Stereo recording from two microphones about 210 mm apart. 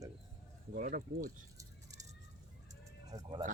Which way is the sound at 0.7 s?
40° right (ahead or behind).